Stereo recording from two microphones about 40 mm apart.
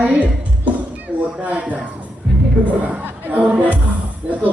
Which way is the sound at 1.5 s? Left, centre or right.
Right.